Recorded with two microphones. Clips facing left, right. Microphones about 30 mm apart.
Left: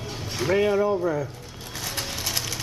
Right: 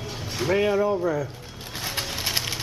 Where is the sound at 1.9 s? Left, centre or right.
Right.